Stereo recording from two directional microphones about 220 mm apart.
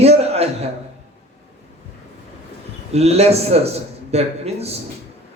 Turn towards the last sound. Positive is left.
turn(degrees=-30)  # may be behind; listen again after turning